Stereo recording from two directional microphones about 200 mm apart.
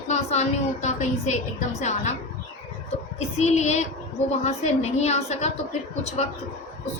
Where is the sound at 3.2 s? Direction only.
35° left (ahead or behind).